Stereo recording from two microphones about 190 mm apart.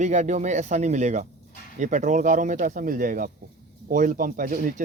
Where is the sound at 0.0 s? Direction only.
40° right (ahead or behind).